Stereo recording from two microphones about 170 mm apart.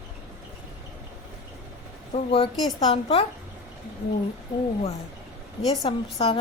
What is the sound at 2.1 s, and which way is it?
A woman's voice, 30° left (ahead or behind).